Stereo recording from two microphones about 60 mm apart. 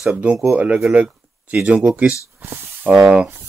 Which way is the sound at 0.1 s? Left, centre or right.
Centre.